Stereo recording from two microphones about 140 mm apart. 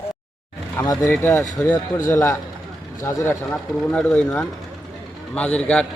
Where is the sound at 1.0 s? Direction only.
15° left (ahead or behind).